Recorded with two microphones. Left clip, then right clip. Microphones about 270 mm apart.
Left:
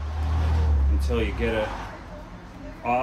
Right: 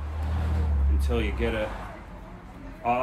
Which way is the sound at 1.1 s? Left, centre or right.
Centre.